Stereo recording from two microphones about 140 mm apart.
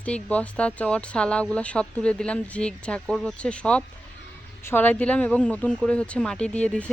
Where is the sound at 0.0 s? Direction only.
10° left (ahead or behind).